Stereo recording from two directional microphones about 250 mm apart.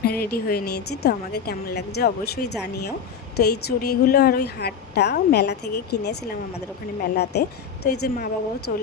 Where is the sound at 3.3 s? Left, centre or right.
Left.